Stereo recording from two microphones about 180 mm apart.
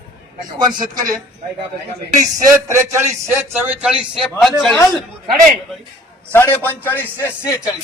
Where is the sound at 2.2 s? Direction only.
20° right (ahead or behind); by 4.7 s centre (ahead or behind).